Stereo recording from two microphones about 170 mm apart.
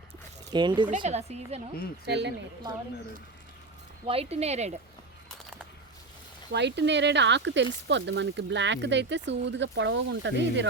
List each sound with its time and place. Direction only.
0.5 s speech: 25° right (ahead or behind)
0.9 s a woman's voice: 45° right (ahead or behind)
2.0 s speech: 90° right
4.0 s a woman's voice: 35° right (ahead or behind)
6.5 s speech: 90° right